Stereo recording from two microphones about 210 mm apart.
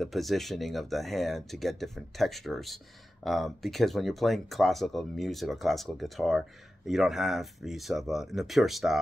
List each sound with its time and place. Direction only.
0.0 s speech: centre (ahead or behind)